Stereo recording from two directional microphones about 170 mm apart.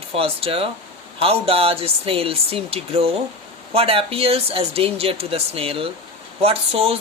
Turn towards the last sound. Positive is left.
turn(degrees=-35)  # may be behind; listen again after turning